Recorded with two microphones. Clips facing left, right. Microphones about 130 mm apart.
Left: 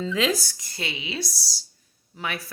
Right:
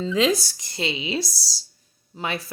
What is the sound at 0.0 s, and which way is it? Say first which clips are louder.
Speech: right 3 dB; 20° right (ahead or behind).